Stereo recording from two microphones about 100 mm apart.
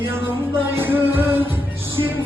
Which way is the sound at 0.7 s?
20° right (ahead or behind).